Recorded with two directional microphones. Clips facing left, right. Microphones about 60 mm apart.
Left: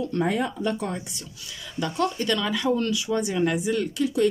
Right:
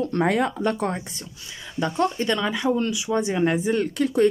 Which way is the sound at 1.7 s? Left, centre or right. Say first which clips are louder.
Right 3 dB; right.